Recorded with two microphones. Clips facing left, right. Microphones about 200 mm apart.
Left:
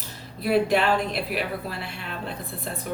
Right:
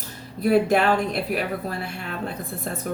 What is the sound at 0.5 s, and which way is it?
Speech, 45° right (ahead or behind).